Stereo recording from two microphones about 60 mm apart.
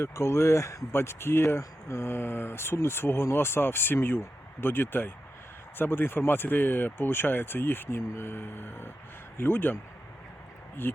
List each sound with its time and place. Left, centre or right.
0.0 s speech: left
0.9 s speech: left
10.8 s speech: left